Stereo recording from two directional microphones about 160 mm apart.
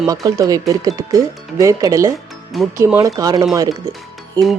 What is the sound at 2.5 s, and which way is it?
Speech, centre (ahead or behind).